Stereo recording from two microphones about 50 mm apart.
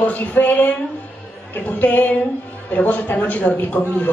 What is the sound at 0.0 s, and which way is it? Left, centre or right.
Speech, left.